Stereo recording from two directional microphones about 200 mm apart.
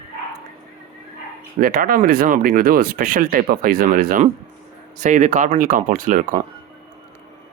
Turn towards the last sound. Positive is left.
turn(degrees=-40)  # may be behind; listen again after turning